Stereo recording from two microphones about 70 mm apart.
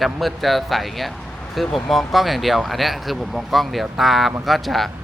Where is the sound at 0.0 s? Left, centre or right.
Centre.